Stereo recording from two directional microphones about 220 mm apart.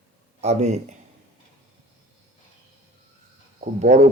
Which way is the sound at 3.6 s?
35° right (ahead or behind).